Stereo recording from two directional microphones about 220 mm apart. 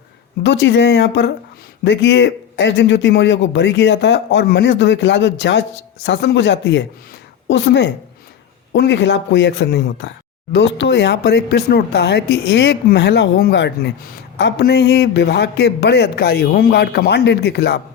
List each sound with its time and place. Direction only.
0.4 s speech: 55° left (ahead or behind)